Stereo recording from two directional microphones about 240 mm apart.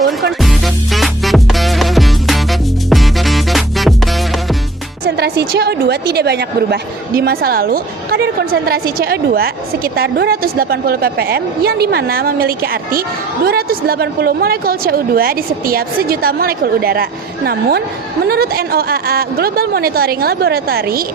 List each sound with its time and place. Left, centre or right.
0.4 s music: centre
5.0 s a woman's voice: right